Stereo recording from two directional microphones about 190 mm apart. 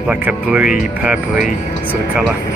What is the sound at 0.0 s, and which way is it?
Speech, 5° right (ahead or behind).